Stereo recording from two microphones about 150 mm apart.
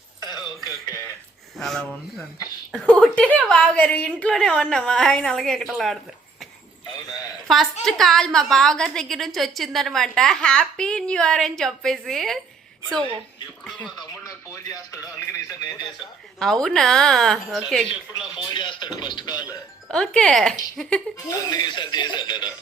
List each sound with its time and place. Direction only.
0.2 s music: 25° left (ahead or behind)
1.5 s a woman's voice: centre (ahead or behind)
7.1 s a woman's voice: centre (ahead or behind)
13.7 s a woman's voice: 5° left (ahead or behind)
14.1 s music: 20° left (ahead or behind)
15.7 s speech: 30° left (ahead or behind)
16.4 s a woman's voice: 5° left (ahead or behind)
18.5 s speech: 30° left (ahead or behind)
19.9 s a woman's voice: 5° left (ahead or behind)
21.3 s speech: 30° left (ahead or behind)